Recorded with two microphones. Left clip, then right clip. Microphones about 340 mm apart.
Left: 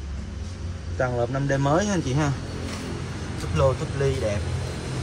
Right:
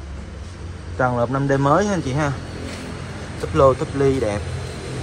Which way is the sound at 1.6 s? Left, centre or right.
Right.